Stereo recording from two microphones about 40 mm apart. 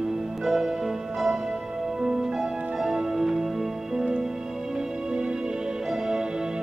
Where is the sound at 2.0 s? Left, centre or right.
Centre.